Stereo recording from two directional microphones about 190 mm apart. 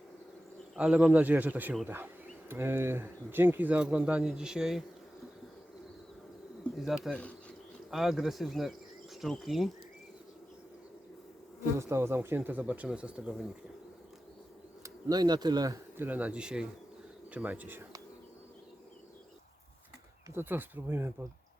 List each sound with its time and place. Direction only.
0.8 s speech: 5° right (ahead or behind)
6.7 s speech: centre (ahead or behind)
11.8 s speech: 15° right (ahead or behind)
14.8 s speech: 20° right (ahead or behind)
20.3 s speech: 10° right (ahead or behind)